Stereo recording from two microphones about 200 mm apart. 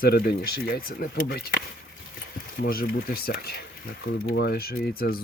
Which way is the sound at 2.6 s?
45° left (ahead or behind).